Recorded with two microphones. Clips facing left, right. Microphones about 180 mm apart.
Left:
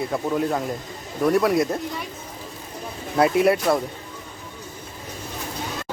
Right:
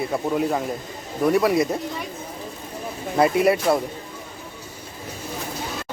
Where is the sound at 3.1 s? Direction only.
Centre (ahead or behind).